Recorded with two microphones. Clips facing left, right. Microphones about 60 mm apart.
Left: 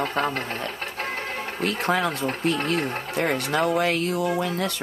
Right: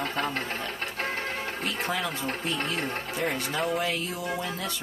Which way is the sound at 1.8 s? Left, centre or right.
Left.